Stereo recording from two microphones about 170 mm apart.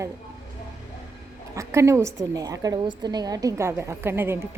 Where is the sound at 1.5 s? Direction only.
15° right (ahead or behind).